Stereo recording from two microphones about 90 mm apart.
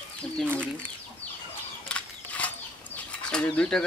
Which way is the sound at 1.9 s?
15° left (ahead or behind).